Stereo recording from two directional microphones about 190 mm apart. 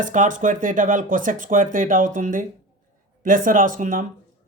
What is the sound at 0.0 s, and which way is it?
Speech, 40° right (ahead or behind).